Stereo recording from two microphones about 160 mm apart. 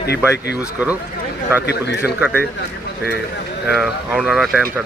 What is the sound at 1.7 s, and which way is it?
Speech, 90° left.